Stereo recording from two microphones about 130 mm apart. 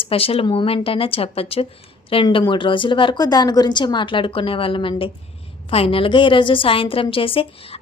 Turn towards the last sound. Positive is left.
turn(degrees=45)  # may be behind; listen again after turning